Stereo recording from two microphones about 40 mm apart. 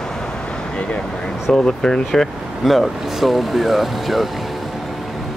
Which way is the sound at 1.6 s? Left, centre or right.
Centre.